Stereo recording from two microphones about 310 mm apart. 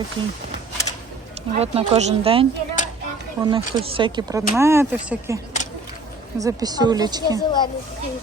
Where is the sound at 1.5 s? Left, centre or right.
Centre.